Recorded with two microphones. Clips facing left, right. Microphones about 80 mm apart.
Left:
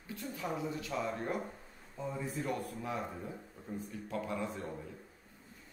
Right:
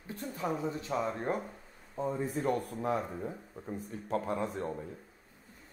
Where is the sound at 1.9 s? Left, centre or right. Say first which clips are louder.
Right 6 dB; right.